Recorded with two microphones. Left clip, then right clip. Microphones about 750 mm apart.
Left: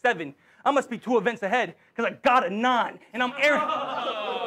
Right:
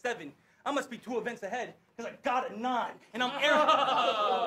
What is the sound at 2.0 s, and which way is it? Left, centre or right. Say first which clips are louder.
Speech: left 11 dB; left.